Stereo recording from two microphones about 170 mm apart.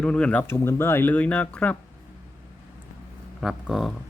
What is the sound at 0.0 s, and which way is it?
Speech, 5° left (ahead or behind).